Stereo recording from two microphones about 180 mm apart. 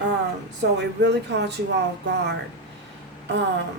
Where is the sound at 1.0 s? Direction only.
70° right (ahead or behind).